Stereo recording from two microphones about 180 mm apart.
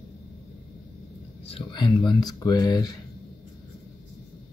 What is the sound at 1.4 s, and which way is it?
Speech, 30° left (ahead or behind).